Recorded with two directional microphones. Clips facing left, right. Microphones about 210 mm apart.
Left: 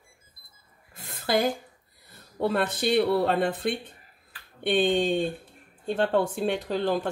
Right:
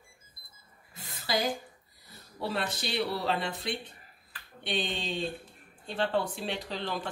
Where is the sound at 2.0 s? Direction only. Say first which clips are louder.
Left 9 dB; 55° left (ahead or behind).